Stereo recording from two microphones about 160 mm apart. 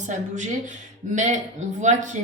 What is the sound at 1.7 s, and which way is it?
Speech, 50° right (ahead or behind).